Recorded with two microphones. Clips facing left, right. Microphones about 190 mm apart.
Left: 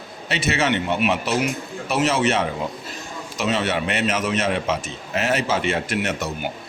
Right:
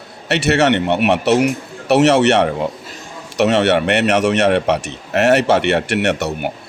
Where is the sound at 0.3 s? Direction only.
70° right (ahead or behind).